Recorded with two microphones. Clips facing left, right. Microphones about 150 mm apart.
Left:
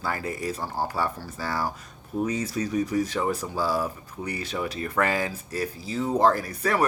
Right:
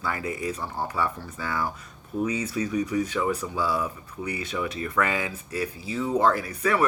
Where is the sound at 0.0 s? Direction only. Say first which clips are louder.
Even; 40° left (ahead or behind).